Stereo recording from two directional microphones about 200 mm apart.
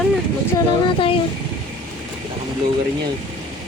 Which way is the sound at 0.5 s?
25° left (ahead or behind).